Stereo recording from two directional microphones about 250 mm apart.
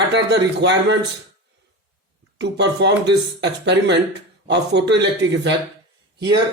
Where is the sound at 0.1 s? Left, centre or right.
Right.